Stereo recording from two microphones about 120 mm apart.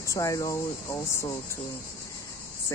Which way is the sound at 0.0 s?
25° left (ahead or behind).